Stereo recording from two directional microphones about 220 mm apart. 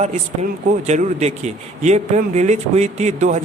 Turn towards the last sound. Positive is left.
turn(degrees=-30)  # may be behind; listen again after turning